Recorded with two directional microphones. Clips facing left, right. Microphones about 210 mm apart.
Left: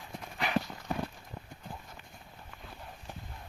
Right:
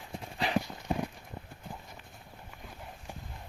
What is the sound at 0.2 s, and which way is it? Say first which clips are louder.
Clip-clop: right 1 dB; 30° right (ahead or behind).